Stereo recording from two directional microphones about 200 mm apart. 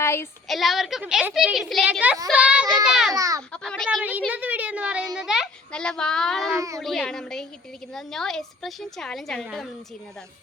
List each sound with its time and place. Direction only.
0.0 s a woman's voice: 15° left (ahead or behind)
0.4 s a woman's voice: centre (ahead or behind)
3.2 s a child's voice: 15° right (ahead or behind)
3.5 s a woman's voice: 5° left (ahead or behind)
3.8 s a woman's voice: 5° right (ahead or behind)
6.5 s a child's voice: 15° right (ahead or behind)
6.7 s a woman's voice: centre (ahead or behind)